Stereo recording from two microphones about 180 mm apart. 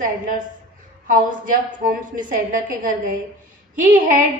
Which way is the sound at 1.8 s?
50° right (ahead or behind).